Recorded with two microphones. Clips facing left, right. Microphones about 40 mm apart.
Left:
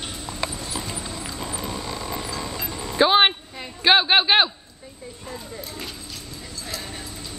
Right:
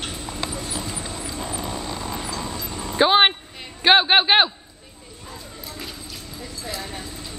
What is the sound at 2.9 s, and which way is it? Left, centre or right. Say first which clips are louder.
Vehicle: right 1 dB; centre.